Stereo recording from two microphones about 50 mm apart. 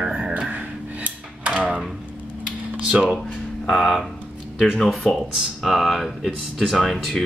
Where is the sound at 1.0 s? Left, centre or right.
Right.